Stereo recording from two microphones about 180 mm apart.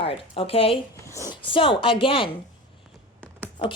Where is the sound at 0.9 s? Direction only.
15° left (ahead or behind).